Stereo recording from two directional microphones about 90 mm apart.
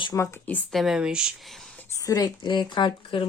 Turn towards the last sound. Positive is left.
turn(degrees=65)  # may be behind; listen again after turning